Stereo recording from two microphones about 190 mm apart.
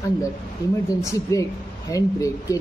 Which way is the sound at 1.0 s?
15° left (ahead or behind).